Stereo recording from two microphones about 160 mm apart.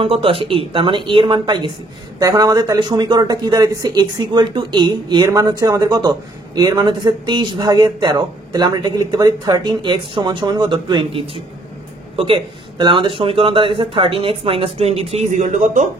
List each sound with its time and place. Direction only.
0.0 s speech: 35° right (ahead or behind)
15.4 s speech: 55° right (ahead or behind)